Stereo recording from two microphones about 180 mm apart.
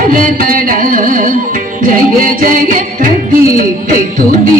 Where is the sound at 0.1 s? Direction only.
50° right (ahead or behind).